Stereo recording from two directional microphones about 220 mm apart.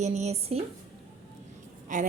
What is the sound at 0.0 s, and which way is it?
Speech, 30° right (ahead or behind).